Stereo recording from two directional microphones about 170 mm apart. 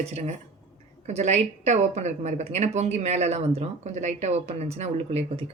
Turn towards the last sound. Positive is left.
turn(degrees=-35)  # may be behind; listen again after turning